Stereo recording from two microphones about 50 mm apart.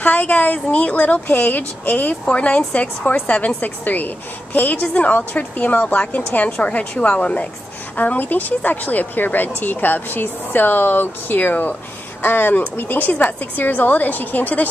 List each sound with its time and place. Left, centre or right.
0.0 s speech: left
2.2 s speech: left